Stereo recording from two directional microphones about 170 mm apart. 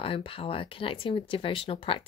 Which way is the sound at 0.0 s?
30° left (ahead or behind).